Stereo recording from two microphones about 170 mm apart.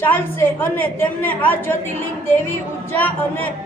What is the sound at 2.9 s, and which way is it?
Speech, 10° left (ahead or behind).